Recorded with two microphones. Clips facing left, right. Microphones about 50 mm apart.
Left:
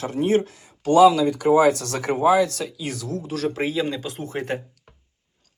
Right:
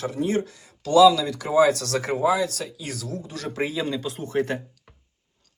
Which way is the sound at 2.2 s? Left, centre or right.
Left.